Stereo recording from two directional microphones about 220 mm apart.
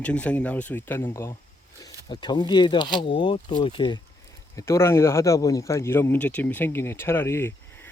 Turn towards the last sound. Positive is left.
turn(degrees=10)  # may be behind; listen again after turning